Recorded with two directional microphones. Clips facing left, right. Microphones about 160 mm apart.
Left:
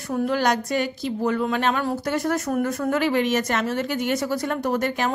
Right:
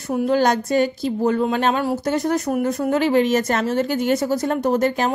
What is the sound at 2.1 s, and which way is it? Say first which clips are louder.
A woman's voice: right 3 dB; 20° right (ahead or behind).